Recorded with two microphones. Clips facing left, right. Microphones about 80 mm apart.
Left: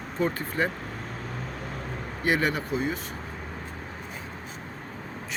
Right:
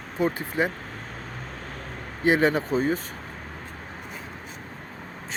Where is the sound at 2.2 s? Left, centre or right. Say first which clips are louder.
Right 5 dB; right.